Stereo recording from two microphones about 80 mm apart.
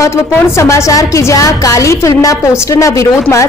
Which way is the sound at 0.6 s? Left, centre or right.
Left.